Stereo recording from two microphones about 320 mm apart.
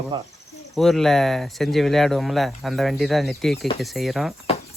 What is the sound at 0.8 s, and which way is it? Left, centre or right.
Speech, centre.